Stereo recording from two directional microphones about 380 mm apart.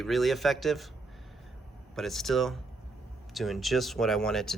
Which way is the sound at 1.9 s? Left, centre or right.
Centre.